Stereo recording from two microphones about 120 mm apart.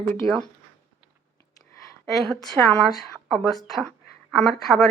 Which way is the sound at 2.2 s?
5° left (ahead or behind).